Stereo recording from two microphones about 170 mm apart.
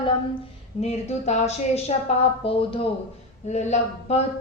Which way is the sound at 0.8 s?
40° left (ahead or behind).